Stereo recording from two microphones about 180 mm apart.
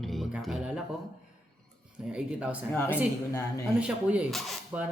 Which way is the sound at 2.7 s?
10° left (ahead or behind).